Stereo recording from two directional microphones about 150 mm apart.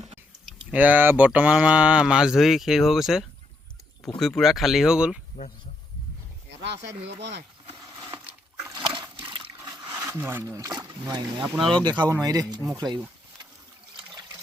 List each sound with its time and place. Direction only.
0.7 s speech: 10° right (ahead or behind)
8.1 s a sound: 15° right (ahead or behind)
8.7 s water: 35° right (ahead or behind)
9.6 s speech: 20° right (ahead or behind)
11.4 s speech: centre (ahead or behind)
11.8 s speech: 30° right (ahead or behind)